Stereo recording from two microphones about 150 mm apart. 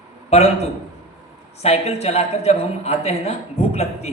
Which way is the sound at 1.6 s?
45° left (ahead or behind).